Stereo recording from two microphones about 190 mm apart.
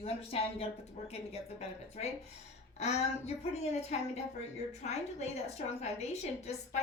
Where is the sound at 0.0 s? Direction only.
30° left (ahead or behind).